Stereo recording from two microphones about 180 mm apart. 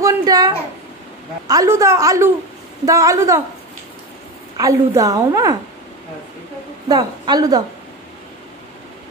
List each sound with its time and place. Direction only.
0.0 s a woman's voice: 20° right (ahead or behind)
1.5 s a woman's voice: 15° right (ahead or behind)
4.6 s a woman's voice: 20° right (ahead or behind)
6.9 s a woman's voice: 20° right (ahead or behind)